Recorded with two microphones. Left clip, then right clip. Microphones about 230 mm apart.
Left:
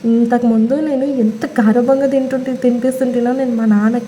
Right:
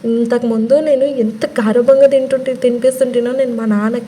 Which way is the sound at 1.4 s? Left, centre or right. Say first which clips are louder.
Right 4 dB; right.